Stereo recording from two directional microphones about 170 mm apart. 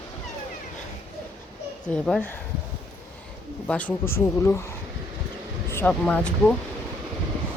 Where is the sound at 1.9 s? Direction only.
5° left (ahead or behind).